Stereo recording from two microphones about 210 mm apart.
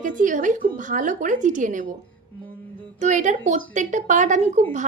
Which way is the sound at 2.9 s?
35° right (ahead or behind).